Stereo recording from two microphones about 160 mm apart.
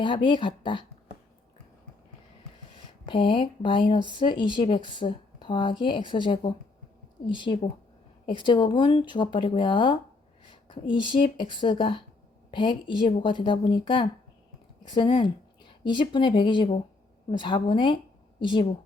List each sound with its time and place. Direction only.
0.0 s a woman's voice: 30° left (ahead or behind)
3.1 s a woman's voice: 30° left (ahead or behind)